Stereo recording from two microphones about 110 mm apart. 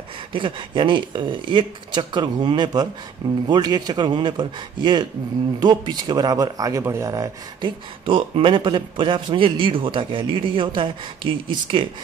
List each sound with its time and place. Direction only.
0.3 s a man's voice: 50° right (ahead or behind); by 7.2 s 30° right (ahead or behind)
7.6 s a man's voice: 50° right (ahead or behind)